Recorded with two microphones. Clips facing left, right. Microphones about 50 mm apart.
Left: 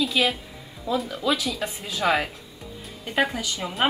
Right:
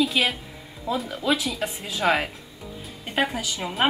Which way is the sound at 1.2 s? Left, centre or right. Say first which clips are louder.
Right 1 dB; right.